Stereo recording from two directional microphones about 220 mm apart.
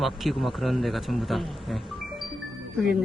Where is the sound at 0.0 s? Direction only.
Centre (ahead or behind).